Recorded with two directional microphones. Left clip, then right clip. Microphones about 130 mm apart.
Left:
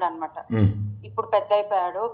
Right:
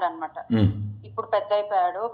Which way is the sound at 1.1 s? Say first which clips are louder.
Left 2 dB; 5° left (ahead or behind).